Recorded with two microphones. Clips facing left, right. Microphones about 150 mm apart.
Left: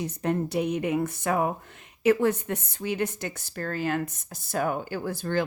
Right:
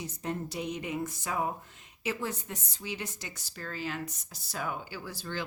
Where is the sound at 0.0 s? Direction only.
65° left (ahead or behind).